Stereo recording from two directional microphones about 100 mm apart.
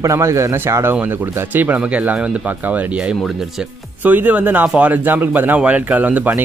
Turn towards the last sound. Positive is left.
turn(degrees=-15)  # may be behind; listen again after turning